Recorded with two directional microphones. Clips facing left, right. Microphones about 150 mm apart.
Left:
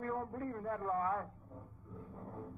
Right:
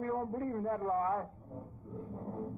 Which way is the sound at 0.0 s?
30° right (ahead or behind).